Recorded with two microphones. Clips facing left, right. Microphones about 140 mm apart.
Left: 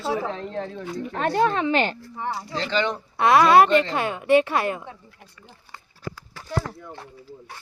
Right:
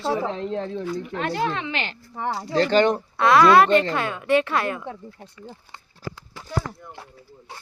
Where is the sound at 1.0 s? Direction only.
40° left (ahead or behind).